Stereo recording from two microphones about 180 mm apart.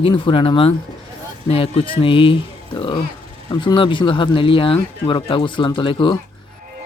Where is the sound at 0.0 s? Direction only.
30° left (ahead or behind).